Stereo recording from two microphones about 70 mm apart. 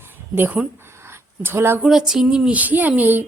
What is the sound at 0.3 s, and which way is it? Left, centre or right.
Speech, right.